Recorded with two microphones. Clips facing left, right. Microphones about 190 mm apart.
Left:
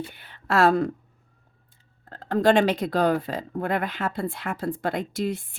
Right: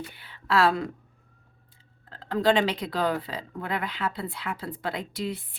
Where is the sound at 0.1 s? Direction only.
50° left (ahead or behind).